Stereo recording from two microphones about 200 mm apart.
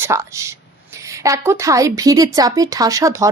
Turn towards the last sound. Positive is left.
turn(degrees=-15)  # may be behind; listen again after turning